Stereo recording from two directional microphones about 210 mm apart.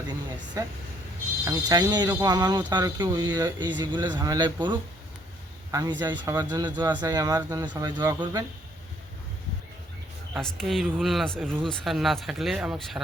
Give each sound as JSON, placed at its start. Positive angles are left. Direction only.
{"t": 0.6, "sound": "speech", "side_deg": -15}
{"t": 10.3, "sound": "speech", "side_deg": 0}